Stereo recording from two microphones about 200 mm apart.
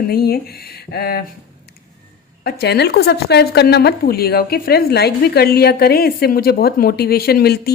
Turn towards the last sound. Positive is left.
turn(degrees=50)  # may be behind; listen again after turning